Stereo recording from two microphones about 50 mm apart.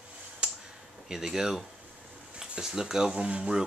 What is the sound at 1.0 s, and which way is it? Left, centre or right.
Speech, centre.